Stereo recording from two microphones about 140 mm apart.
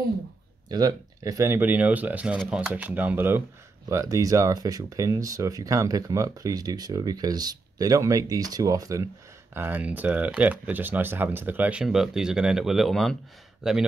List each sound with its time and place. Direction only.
0.7 s speech: 25° right (ahead or behind)
9.5 s speech: 15° right (ahead or behind)